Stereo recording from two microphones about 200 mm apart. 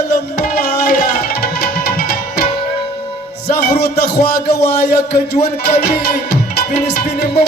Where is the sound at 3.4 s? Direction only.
55° left (ahead or behind).